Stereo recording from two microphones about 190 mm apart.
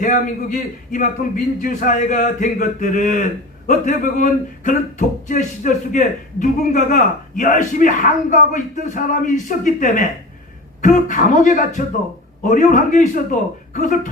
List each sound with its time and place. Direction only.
0.0 s speech: 45° left (ahead or behind)